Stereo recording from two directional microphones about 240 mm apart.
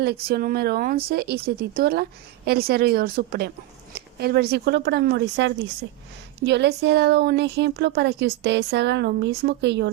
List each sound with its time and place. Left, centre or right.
0.0 s speech: right